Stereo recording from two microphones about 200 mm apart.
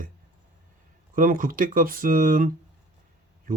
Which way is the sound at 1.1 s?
45° right (ahead or behind).